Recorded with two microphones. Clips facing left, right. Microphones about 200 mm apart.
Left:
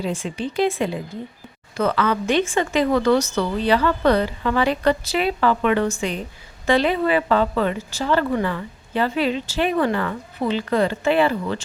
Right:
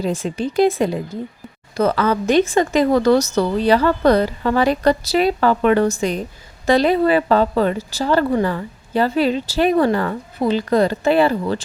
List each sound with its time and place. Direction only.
0.0 s a woman's voice: 40° right (ahead or behind)